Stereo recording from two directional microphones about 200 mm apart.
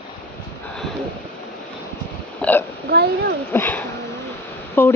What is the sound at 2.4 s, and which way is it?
Burping, 5° left (ahead or behind).